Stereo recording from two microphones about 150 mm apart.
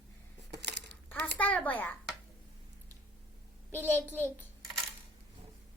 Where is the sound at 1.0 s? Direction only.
10° left (ahead or behind).